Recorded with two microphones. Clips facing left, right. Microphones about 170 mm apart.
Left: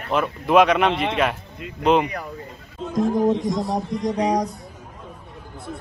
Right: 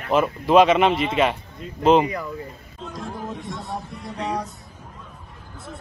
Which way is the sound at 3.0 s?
40° left (ahead or behind).